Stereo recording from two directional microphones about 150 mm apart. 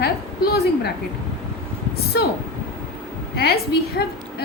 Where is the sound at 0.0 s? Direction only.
90° left.